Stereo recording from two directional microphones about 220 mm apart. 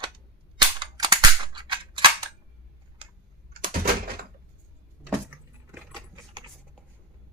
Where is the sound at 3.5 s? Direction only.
40° right (ahead or behind).